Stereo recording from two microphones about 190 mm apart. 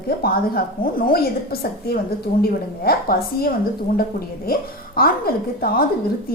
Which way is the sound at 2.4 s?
55° left (ahead or behind).